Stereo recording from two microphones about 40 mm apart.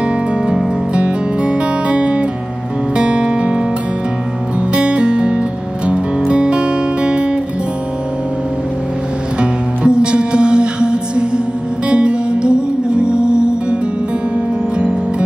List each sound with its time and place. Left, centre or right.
0.9 s music: right
3.0 s guitar: right
4.7 s music: right
9.4 s music: right
14.8 s music: right